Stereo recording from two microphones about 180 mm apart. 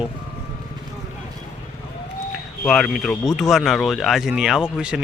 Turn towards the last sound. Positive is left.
turn(degrees=-5)  # may be behind; listen again after turning